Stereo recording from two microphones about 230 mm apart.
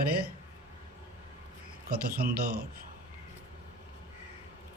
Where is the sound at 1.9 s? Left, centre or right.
Right.